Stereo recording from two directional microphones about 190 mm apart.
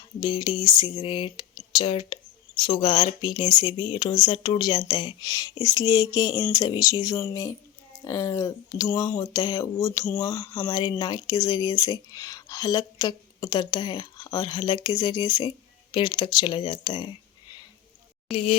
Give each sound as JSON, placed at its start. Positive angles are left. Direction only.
{"t": 0.2, "sound": "speech", "side_deg": 25}